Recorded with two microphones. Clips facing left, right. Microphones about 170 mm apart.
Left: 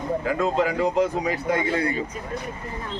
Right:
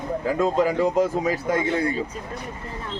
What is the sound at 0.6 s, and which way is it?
Speech, 45° right (ahead or behind).